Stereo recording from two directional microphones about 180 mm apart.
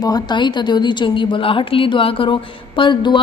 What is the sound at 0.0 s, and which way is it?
A woman's voice, 20° left (ahead or behind).